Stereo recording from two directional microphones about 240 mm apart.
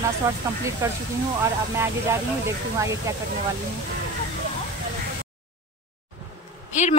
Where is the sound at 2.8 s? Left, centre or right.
Centre.